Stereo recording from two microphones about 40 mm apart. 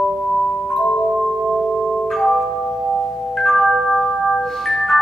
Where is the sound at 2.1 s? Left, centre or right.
Centre.